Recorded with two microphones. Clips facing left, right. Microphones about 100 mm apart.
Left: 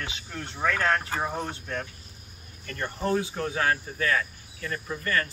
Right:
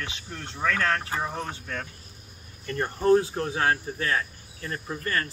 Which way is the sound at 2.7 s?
35° right (ahead or behind).